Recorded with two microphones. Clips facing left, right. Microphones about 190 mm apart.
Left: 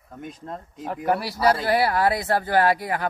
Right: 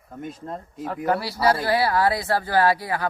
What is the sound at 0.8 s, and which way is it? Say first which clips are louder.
A woman's voice: even; 15° left (ahead or behind).